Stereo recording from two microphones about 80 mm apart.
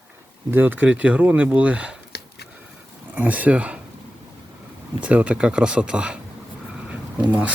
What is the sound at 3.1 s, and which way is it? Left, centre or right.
Speech, centre.